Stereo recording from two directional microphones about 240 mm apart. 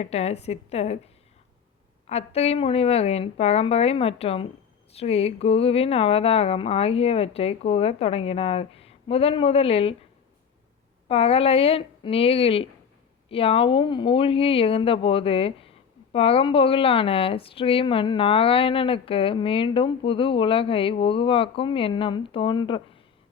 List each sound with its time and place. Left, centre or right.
0.0 s speech: left
11.1 s speech: left